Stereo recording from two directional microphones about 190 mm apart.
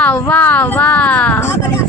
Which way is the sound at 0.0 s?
10° left (ahead or behind).